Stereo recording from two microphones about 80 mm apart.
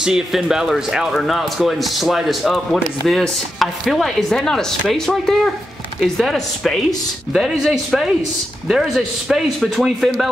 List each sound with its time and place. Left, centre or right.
0.0 s speech: centre